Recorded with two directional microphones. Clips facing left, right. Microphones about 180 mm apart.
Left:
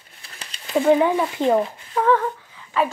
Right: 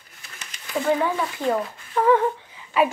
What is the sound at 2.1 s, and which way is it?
Humming, 20° right (ahead or behind).